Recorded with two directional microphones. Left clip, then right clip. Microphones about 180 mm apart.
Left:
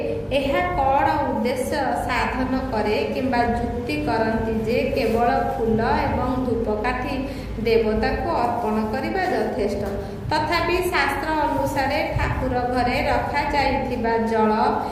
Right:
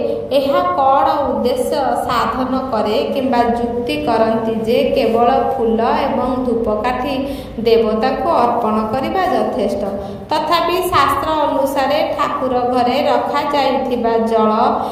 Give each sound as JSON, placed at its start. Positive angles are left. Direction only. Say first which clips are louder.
{"t": 0.3, "sound": "a woman's voice", "louder": "right 7 dB", "side_deg": -35}
{"t": 4.1, "sound": "a woman's voice", "louder": "right 8 dB", "side_deg": -45}
{"t": 7.7, "sound": "a woman's voice", "louder": "right 6 dB", "side_deg": -45}
{"t": 10.5, "sound": "a woman's voice", "louder": "right 9 dB", "side_deg": -40}